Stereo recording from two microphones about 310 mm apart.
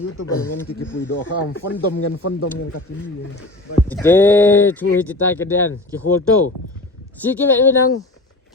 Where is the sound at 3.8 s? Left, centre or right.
Centre.